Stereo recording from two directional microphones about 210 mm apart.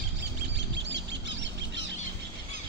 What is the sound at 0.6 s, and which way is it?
Chicken, 55° right (ahead or behind).